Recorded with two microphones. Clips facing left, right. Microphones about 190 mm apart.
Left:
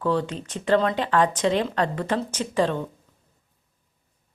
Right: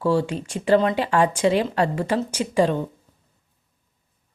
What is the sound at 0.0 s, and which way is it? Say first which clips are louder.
A woman's voice: right 3 dB; 10° right (ahead or behind).